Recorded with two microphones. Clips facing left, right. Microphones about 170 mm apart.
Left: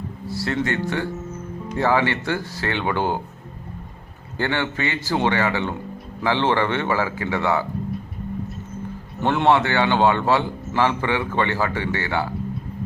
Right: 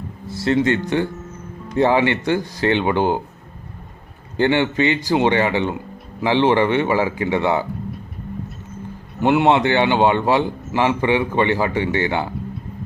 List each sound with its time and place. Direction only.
0.3 s a man's voice: 20° right (ahead or behind)
4.4 s a man's voice: 20° right (ahead or behind)
9.2 s a man's voice: 15° right (ahead or behind)